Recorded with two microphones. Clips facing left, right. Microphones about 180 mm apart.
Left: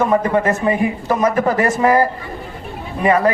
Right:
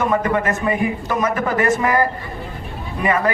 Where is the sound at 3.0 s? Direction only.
35° left (ahead or behind).